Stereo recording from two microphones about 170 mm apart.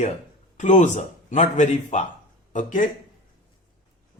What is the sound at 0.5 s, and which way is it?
A man's voice, 45° left (ahead or behind).